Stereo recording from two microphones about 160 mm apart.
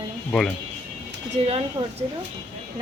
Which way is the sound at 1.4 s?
40° right (ahead or behind).